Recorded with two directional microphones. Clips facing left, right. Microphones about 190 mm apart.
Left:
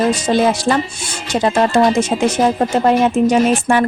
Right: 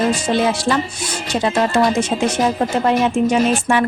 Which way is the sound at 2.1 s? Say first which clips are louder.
Left 3 dB; 45° left (ahead or behind).